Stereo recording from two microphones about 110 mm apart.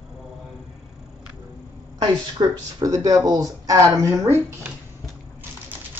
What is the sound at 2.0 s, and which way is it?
Speech, 40° right (ahead or behind).